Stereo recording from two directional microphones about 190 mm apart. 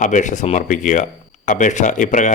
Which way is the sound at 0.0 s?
40° left (ahead or behind).